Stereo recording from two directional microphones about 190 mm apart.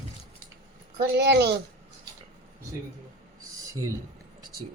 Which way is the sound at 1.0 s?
60° right (ahead or behind).